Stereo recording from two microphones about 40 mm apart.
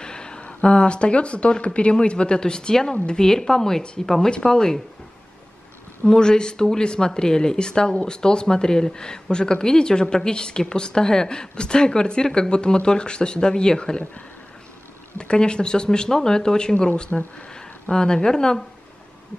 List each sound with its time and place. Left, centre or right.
0.0 s speech: left
6.0 s speech: centre
15.1 s speech: left